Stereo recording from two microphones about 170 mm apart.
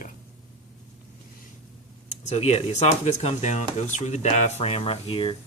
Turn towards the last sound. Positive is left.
turn(degrees=30)  # may be behind; listen again after turning